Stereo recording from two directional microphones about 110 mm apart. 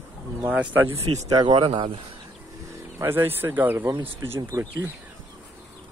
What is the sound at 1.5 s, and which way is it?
Speech, 50° right (ahead or behind).